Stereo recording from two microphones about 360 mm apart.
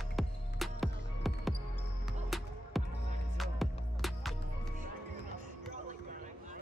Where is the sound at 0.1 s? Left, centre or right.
Centre.